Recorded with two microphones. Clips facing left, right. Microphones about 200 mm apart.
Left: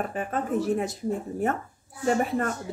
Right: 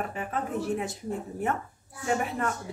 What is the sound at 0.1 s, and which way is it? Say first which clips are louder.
Speech: left 4 dB; 45° left (ahead or behind).